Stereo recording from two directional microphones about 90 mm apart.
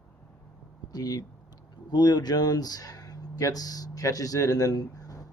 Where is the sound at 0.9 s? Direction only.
50° left (ahead or behind).